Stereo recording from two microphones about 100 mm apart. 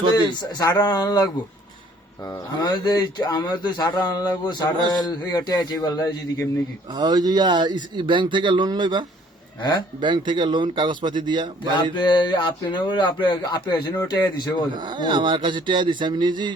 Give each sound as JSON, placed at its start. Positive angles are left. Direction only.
{"t": 0.2, "sound": "speech", "side_deg": 40}
{"t": 6.9, "sound": "a man's voice", "side_deg": -45}
{"t": 9.6, "sound": "speech", "side_deg": 50}
{"t": 10.0, "sound": "a man's voice", "side_deg": -50}
{"t": 11.8, "sound": "speech", "side_deg": 50}
{"t": 14.7, "sound": "a man's voice", "side_deg": -50}